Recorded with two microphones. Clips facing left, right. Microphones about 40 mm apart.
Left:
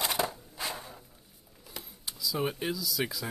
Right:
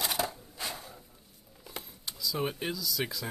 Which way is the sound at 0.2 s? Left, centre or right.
Left.